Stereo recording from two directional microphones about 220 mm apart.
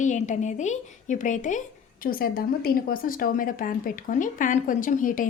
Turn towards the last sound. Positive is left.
turn(degrees=35)  # may be behind; listen again after turning